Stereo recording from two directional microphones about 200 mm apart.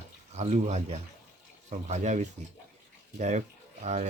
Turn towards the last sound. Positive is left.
turn(degrees=-35)  # may be behind; listen again after turning